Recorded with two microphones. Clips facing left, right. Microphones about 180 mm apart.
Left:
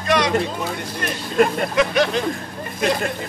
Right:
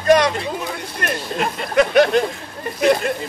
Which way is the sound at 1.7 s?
55° right (ahead or behind).